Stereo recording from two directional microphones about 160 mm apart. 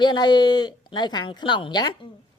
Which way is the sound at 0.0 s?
25° left (ahead or behind).